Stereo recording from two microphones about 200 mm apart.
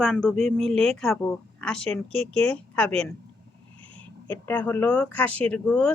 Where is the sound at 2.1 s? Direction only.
30° right (ahead or behind).